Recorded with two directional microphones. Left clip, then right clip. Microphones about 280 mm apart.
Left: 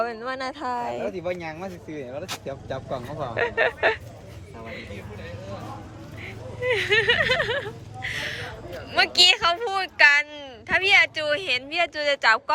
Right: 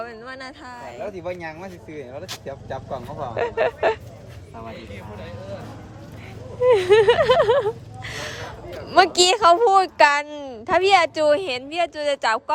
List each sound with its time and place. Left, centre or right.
0.0 s speech: centre
1.2 s speech: left
3.3 s speech: centre
6.6 s speech: centre